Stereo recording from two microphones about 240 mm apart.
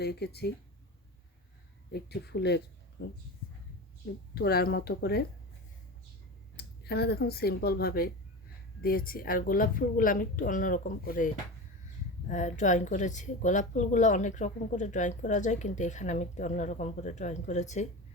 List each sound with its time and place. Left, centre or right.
0.0 s speech: left
1.9 s speech: left
4.4 s a woman's voice: left
6.6 s a woman's voice: left
12.3 s a woman's voice: left